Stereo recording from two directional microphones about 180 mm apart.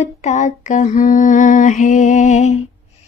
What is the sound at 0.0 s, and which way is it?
Female singing, 40° left (ahead or behind).